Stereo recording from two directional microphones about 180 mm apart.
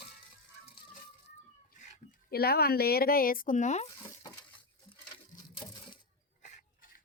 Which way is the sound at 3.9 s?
25° left (ahead or behind).